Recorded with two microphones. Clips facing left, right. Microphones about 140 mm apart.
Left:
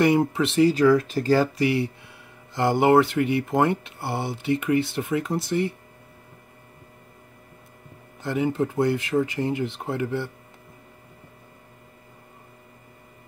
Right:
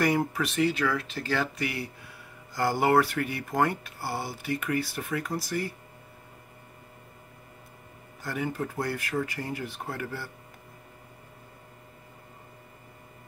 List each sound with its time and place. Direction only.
0.0 s speech: 25° left (ahead or behind)
8.2 s speech: 25° left (ahead or behind)